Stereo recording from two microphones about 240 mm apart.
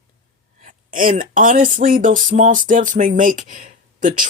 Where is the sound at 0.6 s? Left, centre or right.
Right.